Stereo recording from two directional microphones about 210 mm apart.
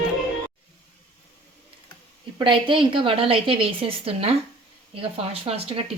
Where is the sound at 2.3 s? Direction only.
25° right (ahead or behind).